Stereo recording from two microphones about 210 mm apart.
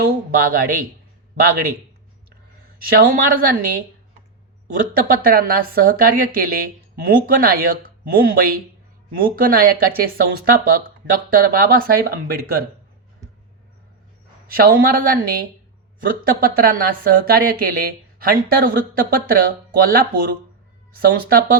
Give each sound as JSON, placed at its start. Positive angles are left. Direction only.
{"t": 0.0, "sound": "speech", "side_deg": -45}
{"t": 2.9, "sound": "speech", "side_deg": -45}
{"t": 4.9, "sound": "speech", "side_deg": -45}
{"t": 14.5, "sound": "speech", "side_deg": -45}